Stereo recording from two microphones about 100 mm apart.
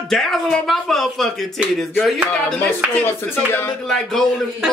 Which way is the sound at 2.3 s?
10° left (ahead or behind).